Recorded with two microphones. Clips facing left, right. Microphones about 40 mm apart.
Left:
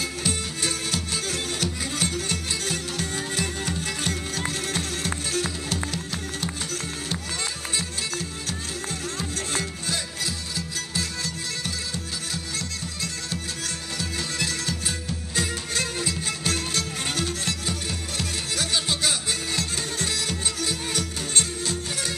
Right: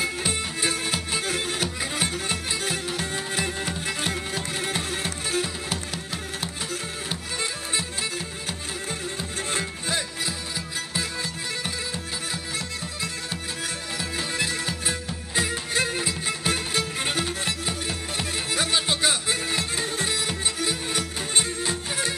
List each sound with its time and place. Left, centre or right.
0.0 s music: centre
9.5 s music: centre
12.5 s music: centre